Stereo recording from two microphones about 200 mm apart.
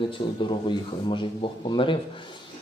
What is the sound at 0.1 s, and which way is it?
Speech, 25° left (ahead or behind).